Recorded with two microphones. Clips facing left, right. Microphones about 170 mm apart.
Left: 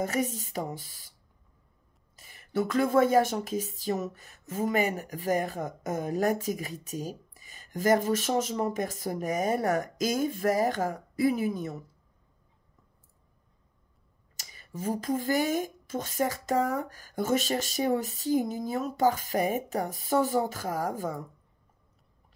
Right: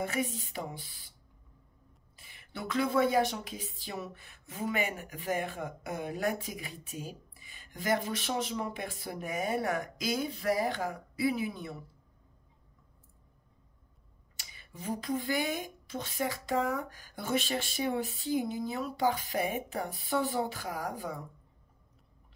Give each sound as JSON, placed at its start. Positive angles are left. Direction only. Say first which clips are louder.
{"t": 0.0, "sound": "speech", "louder": "left 4 dB", "side_deg": 40}
{"t": 2.1, "sound": "speech", "louder": "left 13 dB", "side_deg": 40}
{"t": 14.3, "sound": "speech", "louder": "left 9 dB", "side_deg": 40}